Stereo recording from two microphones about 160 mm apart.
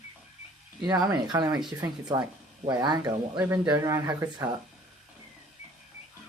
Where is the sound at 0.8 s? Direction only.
25° right (ahead or behind).